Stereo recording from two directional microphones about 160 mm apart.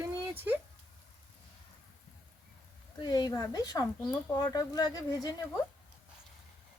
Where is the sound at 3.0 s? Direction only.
25° left (ahead or behind).